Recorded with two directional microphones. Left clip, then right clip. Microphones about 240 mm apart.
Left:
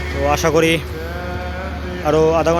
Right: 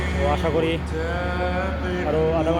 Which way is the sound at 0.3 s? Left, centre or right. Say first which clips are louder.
Left 8 dB; left.